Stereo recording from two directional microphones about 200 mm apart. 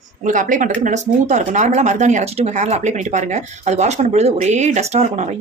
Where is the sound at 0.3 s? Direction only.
40° right (ahead or behind).